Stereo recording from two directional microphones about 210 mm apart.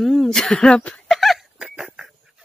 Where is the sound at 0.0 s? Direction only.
Centre (ahead or behind).